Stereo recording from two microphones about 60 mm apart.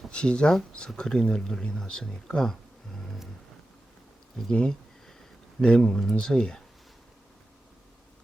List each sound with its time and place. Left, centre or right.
0.1 s speech: centre
4.5 s a sound: centre
5.6 s speech: centre